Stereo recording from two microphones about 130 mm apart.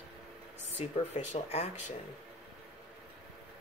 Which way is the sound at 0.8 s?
60° left (ahead or behind).